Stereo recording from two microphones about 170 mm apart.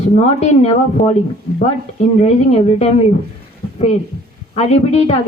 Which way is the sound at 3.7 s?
40° left (ahead or behind).